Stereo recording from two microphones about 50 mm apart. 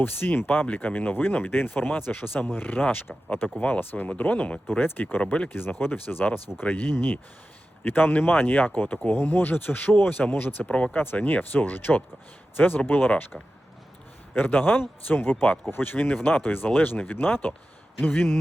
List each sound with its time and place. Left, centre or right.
0.0 s speech: left
5.5 s a man's voice: left
10.9 s speech: left
13.3 s speech: centre
14.3 s a man's voice: left